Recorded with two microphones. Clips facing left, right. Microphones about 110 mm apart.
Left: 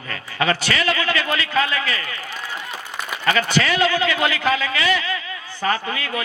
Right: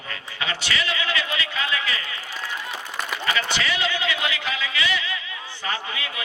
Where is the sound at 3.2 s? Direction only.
50° left (ahead or behind).